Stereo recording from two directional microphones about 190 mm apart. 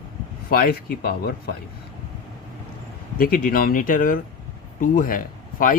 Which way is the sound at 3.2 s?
50° left (ahead or behind).